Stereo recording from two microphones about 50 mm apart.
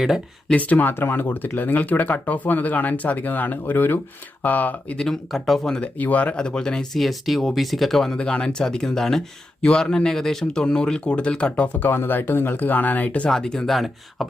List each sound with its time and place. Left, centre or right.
0.5 s speech: left
4.9 s speech: centre
5.8 s speech: left
6.3 s speech: centre
7.0 s speech: centre
8.2 s speech: centre
11.8 s speech: left
13.3 s speech: centre
13.7 s speech: centre